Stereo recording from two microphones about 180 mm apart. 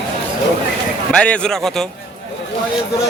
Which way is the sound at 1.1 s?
5° left (ahead or behind).